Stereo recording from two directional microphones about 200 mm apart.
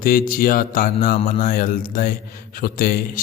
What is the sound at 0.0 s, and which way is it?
A man's voice, 45° left (ahead or behind).